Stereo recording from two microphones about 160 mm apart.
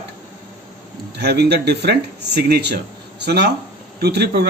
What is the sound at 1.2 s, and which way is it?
A man's voice, 90° right.